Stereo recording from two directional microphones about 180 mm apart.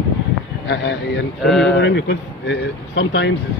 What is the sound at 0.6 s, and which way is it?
Speech, 75° left (ahead or behind).